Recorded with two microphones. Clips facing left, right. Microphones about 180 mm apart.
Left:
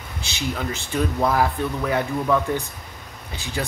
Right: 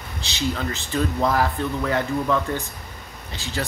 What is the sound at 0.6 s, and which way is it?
Speech, 10° left (ahead or behind).